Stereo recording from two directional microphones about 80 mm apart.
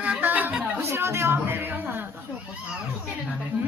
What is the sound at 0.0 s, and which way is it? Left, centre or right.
Chatter, centre.